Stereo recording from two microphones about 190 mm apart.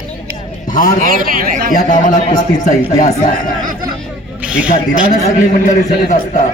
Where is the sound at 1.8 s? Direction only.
40° left (ahead or behind).